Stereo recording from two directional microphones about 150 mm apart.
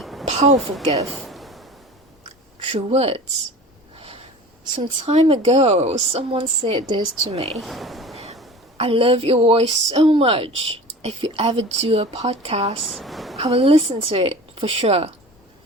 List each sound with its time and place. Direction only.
0.0 s a sound: centre (ahead or behind)
0.3 s a sound: 45° right (ahead or behind)
1.1 s a sound: centre (ahead or behind)
2.7 s a woman's voice: 45° right (ahead or behind)
3.9 s snort: 40° right (ahead or behind)
4.8 s a woman's voice: 40° right (ahead or behind)
6.8 s a woman's voice: 35° right (ahead or behind)
7.5 s speech: centre (ahead or behind)
8.1 s a sound: 45° right (ahead or behind)
8.8 s a woman's voice: 40° right (ahead or behind)
12.8 s a woman's voice: centre (ahead or behind)
13.3 s a woman's voice: 45° right (ahead or behind)